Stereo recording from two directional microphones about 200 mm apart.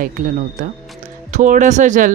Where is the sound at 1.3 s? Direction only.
40° right (ahead or behind).